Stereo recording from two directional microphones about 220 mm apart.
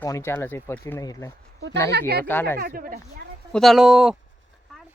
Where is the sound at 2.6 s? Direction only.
40° right (ahead or behind).